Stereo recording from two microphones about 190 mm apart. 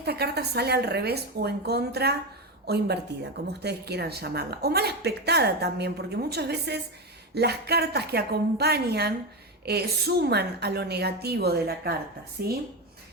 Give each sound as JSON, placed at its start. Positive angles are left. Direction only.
{"t": 0.0, "sound": "speech", "side_deg": -60}